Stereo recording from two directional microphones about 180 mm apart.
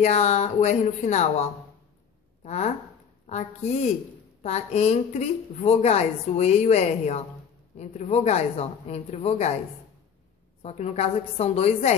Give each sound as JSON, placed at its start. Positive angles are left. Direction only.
{"t": 0.0, "sound": "a woman's voice", "side_deg": 40}
{"t": 10.6, "sound": "a woman's voice", "side_deg": 40}